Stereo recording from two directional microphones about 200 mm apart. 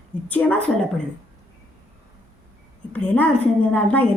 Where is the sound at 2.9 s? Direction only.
5° left (ahead or behind).